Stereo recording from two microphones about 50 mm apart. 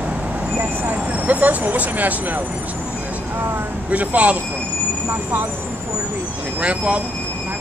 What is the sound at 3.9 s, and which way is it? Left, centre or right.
Speech, right.